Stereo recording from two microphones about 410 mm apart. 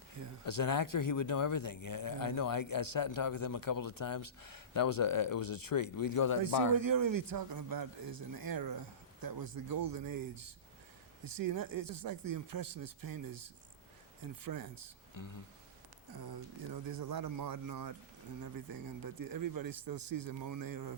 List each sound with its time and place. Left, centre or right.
0.4 s speech: left
6.4 s speech: right
15.2 s speech: left
16.1 s speech: right